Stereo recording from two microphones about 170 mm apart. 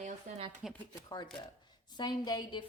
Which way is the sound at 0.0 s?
35° right (ahead or behind).